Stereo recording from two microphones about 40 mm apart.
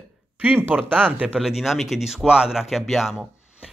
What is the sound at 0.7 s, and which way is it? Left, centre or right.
Speech, right.